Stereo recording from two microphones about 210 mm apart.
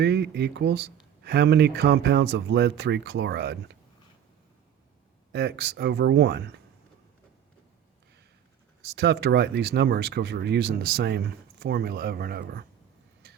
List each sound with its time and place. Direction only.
0.0 s speech: 50° right (ahead or behind)
5.3 s speech: 50° right (ahead or behind)
9.0 s speech: 50° right (ahead or behind)